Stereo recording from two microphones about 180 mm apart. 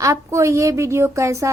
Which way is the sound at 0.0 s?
15° right (ahead or behind).